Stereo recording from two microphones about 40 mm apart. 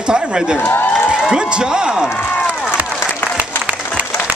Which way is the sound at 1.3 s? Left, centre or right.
Centre.